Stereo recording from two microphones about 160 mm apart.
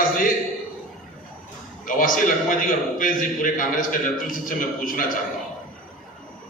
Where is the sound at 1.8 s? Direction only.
60° left (ahead or behind).